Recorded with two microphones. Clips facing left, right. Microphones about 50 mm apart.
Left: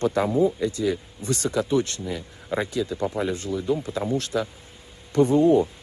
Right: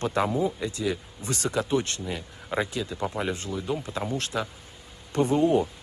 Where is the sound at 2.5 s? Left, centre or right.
Centre.